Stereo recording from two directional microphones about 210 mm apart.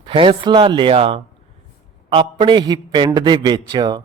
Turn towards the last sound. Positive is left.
turn(degrees=-20)  # may be behind; listen again after turning